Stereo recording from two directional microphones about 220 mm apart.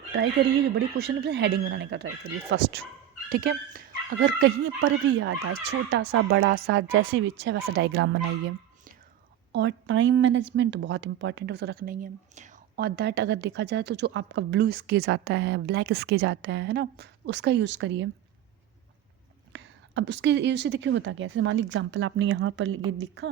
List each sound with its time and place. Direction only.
0.9 s a woman's voice: 45° right (ahead or behind)
4.4 s a woman's voice: 60° right (ahead or behind)
6.9 s a woman's voice: 60° right (ahead or behind)
9.5 s a woman's voice: 55° right (ahead or behind)
19.5 s a woman's voice: 55° right (ahead or behind)